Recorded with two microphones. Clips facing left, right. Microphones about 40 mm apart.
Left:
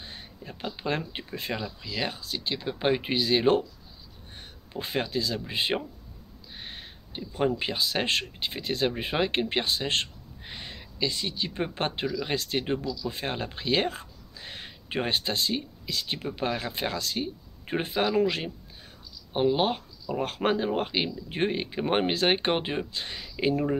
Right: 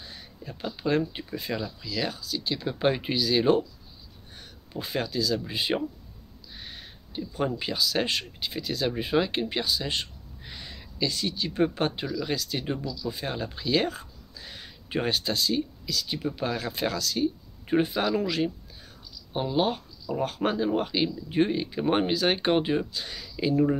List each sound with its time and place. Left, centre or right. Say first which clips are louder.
0.0 s a sound: left 1 dB; left
0.4 s speech: right 1 dB; left
2.6 s speech: right 1 dB; centre
3.2 s speech: even; left
4.4 s a sound: even; left
5.5 s speech: right 1 dB; left
10.4 s speech: left 2 dB; left
12.7 s speech: left 2 dB; left
13.1 s speech: even; left; by 18.3 s centre
19.3 s speech: left 2 dB; left